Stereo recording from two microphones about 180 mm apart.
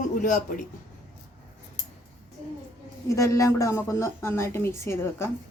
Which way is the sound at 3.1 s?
15° left (ahead or behind).